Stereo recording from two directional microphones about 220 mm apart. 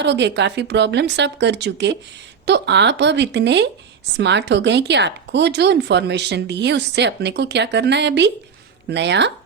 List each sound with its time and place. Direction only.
0.0 s speech: 50° right (ahead or behind)